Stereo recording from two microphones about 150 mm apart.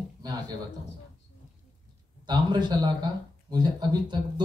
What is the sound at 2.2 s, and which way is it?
Speech, 30° right (ahead or behind).